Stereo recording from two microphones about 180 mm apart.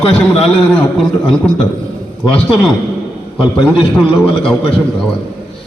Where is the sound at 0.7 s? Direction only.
Centre (ahead or behind).